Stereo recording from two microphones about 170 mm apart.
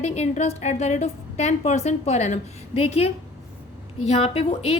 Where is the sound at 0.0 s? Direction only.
40° left (ahead or behind).